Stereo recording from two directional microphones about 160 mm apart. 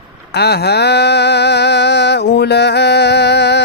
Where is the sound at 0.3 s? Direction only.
90° left.